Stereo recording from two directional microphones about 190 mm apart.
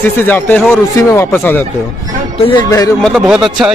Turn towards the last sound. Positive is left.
turn(degrees=-5)  # may be behind; listen again after turning